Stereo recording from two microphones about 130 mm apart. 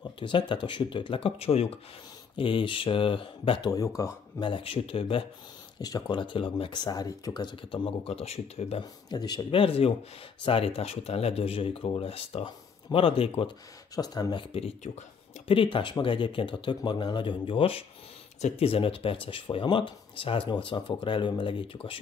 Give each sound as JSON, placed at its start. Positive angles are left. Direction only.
{"t": 0.2, "sound": "speech", "side_deg": 40}
{"t": 3.7, "sound": "speech", "side_deg": 25}
{"t": 4.4, "sound": "speech", "side_deg": 40}
{"t": 5.8, "sound": "speech", "side_deg": 30}
{"t": 9.1, "sound": "speech", "side_deg": 30}
{"t": 13.9, "sound": "speech", "side_deg": 30}
{"t": 15.4, "sound": "speech", "side_deg": 45}